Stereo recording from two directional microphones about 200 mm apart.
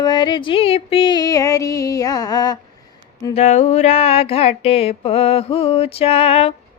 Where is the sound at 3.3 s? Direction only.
35° left (ahead or behind).